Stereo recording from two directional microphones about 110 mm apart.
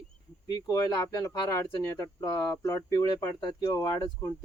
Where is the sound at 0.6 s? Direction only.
35° left (ahead or behind).